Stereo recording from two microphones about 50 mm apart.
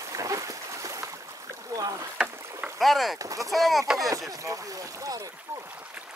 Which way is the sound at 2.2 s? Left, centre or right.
Centre.